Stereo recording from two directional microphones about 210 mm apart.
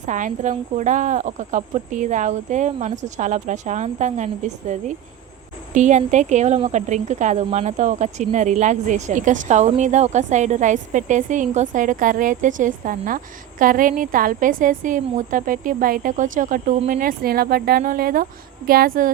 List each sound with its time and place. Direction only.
0.0 s a woman's voice: 35° right (ahead or behind)